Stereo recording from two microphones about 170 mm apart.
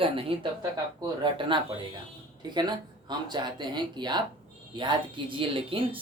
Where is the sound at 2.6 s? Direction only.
25° right (ahead or behind).